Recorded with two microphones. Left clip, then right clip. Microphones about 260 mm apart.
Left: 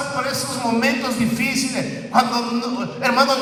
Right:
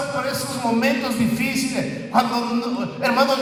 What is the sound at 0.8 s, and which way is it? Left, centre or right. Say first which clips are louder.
Speech: left 1 dB; left.